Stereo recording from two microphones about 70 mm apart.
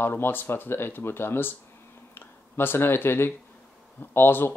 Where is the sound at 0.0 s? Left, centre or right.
Left.